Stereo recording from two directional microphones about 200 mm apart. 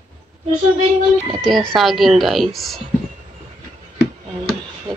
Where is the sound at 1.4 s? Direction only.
5° left (ahead or behind).